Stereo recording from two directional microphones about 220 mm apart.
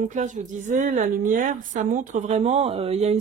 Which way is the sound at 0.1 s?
35° right (ahead or behind).